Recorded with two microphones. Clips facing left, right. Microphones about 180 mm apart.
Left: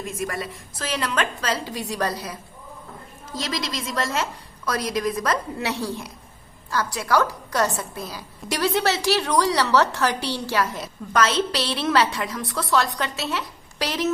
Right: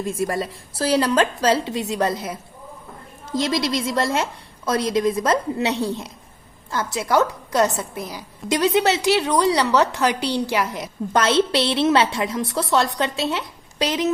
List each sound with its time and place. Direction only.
0.1 s a woman's voice: 30° right (ahead or behind); by 10.9 s 15° right (ahead or behind)
11.1 s a woman's voice: 25° right (ahead or behind)